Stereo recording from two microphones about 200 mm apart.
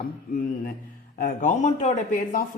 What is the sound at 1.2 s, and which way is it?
Speech, 40° left (ahead or behind).